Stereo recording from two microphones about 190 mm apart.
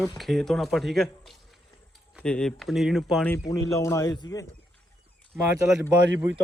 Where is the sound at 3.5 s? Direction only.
15° left (ahead or behind).